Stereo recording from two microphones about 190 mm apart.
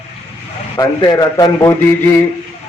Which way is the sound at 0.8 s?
20° left (ahead or behind).